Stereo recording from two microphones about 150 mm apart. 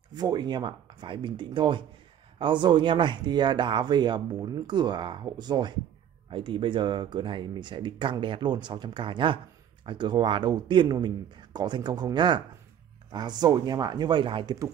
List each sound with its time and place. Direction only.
0.1 s speech: 25° right (ahead or behind)